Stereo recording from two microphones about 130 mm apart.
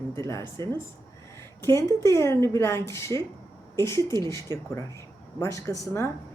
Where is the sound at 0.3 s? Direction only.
25° left (ahead or behind).